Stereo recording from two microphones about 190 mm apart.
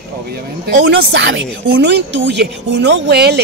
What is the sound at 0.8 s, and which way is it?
Speech, 70° right (ahead or behind).